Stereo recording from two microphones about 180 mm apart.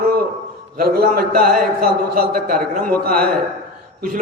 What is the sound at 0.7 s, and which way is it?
A man's voice, 55° right (ahead or behind).